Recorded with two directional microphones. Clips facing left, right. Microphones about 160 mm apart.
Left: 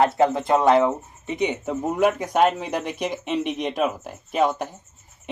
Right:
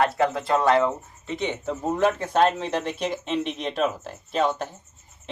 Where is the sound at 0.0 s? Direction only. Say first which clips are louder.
Left 3 dB; 20° left (ahead or behind).